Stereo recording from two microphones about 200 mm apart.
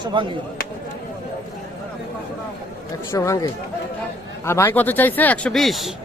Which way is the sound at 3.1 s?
15° left (ahead or behind).